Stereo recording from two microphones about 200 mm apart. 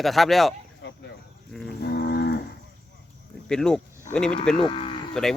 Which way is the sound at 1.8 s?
55° left (ahead or behind).